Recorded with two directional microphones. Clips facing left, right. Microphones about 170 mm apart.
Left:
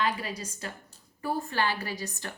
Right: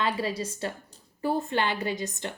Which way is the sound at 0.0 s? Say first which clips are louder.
Right 3 dB; 30° right (ahead or behind).